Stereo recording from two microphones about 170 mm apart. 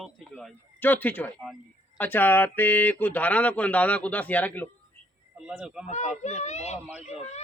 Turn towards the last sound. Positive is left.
turn(degrees=40)  # may be behind; listen again after turning